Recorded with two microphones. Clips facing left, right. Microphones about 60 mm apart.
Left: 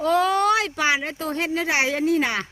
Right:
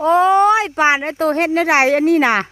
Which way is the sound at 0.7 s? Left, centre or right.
Right.